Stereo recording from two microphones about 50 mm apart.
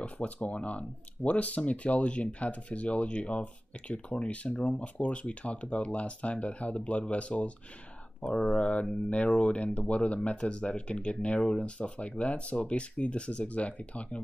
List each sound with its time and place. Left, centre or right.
0.0 s speech: left
8.5 s speech: left